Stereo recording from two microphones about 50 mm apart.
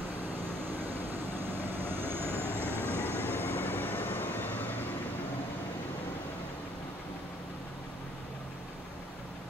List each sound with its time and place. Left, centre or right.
1.3 s vehicle: right
3.0 s vehicle: left